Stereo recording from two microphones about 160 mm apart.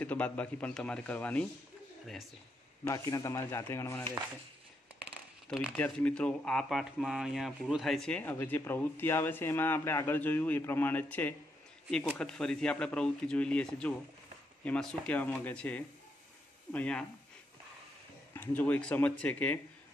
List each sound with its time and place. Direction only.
0.0 s speech: 10° left (ahead or behind)
2.9 s speech: 20° left (ahead or behind)
5.0 s a sound: 5° right (ahead or behind)
5.8 s speech: 5° left (ahead or behind)
18.3 s speech: 10° left (ahead or behind)